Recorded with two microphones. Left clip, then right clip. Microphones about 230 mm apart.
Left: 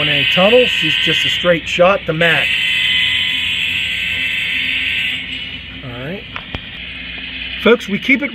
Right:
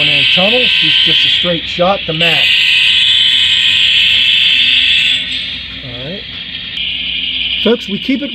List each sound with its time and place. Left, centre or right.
0.0 s speech: centre
1.5 s speech: centre
2.4 s fire alarm: centre
7.6 s speech: centre